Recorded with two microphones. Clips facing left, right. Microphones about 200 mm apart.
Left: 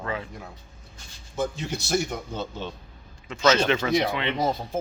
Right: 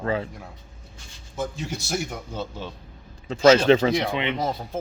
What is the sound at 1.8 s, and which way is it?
Speech, 5° right (ahead or behind).